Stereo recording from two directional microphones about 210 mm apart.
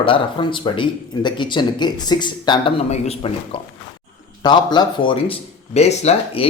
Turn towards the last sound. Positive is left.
turn(degrees=30)  # may be behind; listen again after turning